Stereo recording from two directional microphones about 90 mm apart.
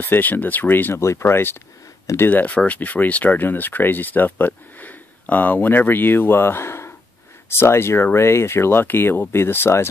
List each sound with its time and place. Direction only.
0.0 s speech: 20° left (ahead or behind)